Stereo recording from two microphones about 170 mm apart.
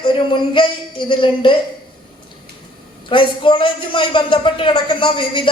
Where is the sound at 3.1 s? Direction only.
30° left (ahead or behind).